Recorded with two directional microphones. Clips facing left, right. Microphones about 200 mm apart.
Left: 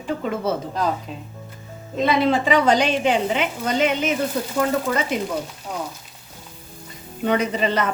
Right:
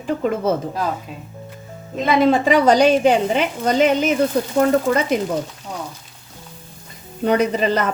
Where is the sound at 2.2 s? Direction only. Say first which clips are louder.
Right 6 dB; 45° right (ahead or behind).